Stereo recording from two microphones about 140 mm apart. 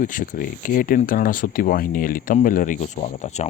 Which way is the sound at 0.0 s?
70° left (ahead or behind).